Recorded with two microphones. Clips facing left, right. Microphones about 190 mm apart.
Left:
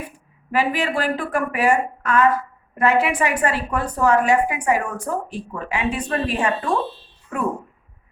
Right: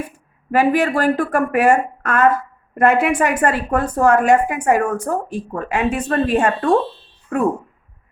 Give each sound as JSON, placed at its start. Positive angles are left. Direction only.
{"t": 0.5, "sound": "a woman's voice", "side_deg": -45}